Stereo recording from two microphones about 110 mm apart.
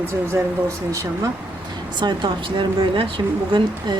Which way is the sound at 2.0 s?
45° right (ahead or behind).